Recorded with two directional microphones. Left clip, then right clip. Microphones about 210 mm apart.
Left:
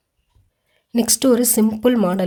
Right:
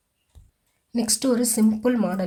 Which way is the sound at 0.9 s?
40° left (ahead or behind).